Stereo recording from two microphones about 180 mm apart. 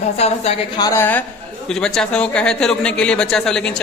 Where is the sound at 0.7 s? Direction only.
20° left (ahead or behind).